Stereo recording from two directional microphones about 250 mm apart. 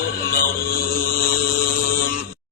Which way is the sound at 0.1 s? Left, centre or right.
Left.